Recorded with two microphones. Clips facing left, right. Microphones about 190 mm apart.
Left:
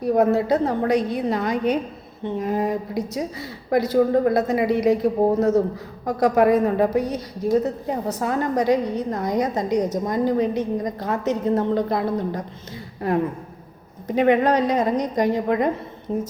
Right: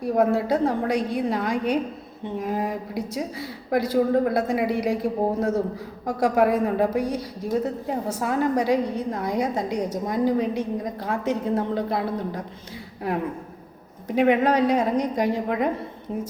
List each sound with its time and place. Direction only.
0.3 s a woman's voice: 10° right (ahead or behind)
14.2 s a woman's voice: 5° right (ahead or behind)
16.1 s a woman's voice: 35° left (ahead or behind)